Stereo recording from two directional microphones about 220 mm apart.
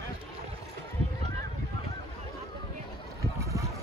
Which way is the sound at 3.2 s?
15° right (ahead or behind).